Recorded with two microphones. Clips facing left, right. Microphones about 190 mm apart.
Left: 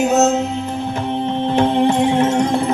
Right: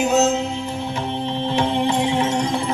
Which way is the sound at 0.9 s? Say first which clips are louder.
Left 5 dB; 50° left (ahead or behind).